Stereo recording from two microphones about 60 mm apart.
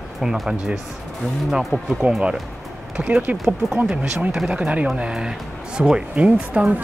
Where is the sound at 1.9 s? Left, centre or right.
Centre.